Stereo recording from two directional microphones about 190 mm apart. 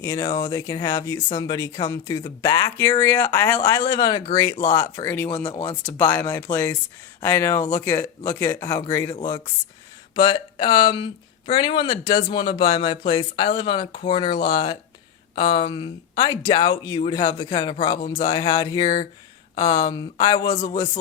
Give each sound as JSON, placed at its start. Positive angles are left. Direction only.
{"t": 0.0, "sound": "speech", "side_deg": 15}
{"t": 10.2, "sound": "speech", "side_deg": 25}